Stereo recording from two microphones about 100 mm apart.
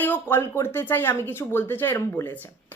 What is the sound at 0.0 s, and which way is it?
Speech, 20° left (ahead or behind).